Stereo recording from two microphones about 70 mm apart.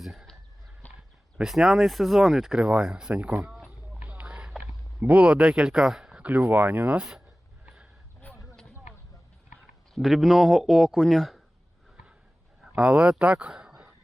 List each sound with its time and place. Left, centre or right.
0.0 s chicken: centre
1.4 s a man's voice: centre
2.6 s speech: centre
4.0 s a sound: centre
5.0 s speech: centre
6.2 s speech: right
9.9 s a man's voice: centre
12.7 s speech: centre